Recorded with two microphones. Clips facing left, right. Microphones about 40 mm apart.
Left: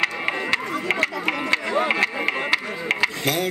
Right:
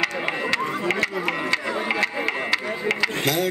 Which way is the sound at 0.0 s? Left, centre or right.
Centre.